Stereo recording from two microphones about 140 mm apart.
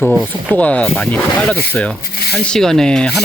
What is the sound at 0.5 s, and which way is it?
Speech, 10° left (ahead or behind).